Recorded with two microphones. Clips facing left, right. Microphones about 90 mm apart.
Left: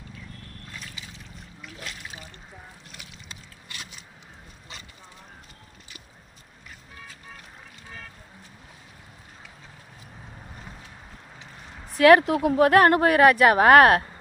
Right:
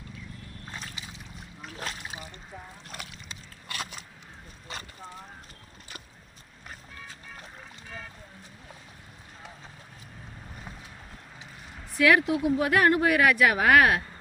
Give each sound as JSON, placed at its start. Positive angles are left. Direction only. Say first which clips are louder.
{"t": 0.7, "sound": "a sound", "louder": "right 2 dB", "side_deg": -30}
{"t": 1.6, "sound": "boat", "louder": "right 3 dB", "side_deg": -35}
{"t": 2.9, "sound": "a sound", "louder": "right 5 dB", "side_deg": -50}
{"t": 3.7, "sound": "vehicle", "louder": "right 6 dB", "side_deg": -50}
{"t": 4.7, "sound": "boat", "louder": "right 5 dB", "side_deg": -45}
{"t": 11.9, "sound": "speech", "louder": "left 6 dB", "side_deg": 50}